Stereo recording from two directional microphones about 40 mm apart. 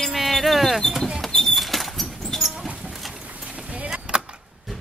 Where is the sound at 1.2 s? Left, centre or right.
Centre.